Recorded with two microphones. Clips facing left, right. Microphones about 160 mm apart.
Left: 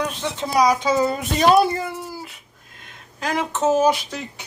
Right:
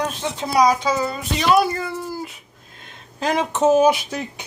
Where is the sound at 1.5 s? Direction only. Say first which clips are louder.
Left 1 dB; 25° left (ahead or behind).